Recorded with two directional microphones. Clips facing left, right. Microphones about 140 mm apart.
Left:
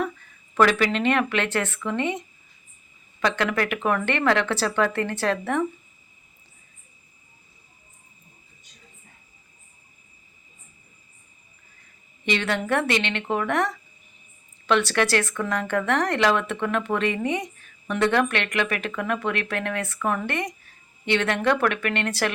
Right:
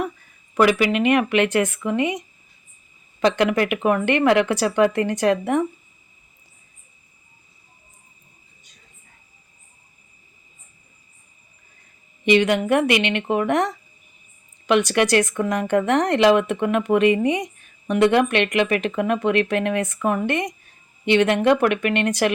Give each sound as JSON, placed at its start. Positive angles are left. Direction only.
{"t": 0.5, "sound": "speech", "side_deg": -10}
{"t": 12.2, "sound": "speech", "side_deg": -15}